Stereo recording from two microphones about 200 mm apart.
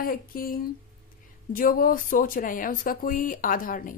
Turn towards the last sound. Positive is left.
turn(degrees=45)  # may be behind; listen again after turning